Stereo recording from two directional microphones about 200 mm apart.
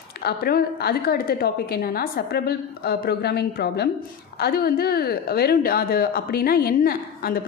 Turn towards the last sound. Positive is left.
turn(degrees=50)  # may be behind; listen again after turning